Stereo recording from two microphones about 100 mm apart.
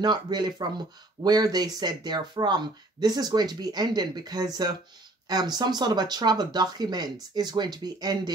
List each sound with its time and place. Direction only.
0.0 s speech: 45° right (ahead or behind)